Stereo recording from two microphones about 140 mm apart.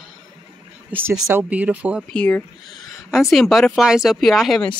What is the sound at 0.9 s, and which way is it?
Speech, 15° right (ahead or behind).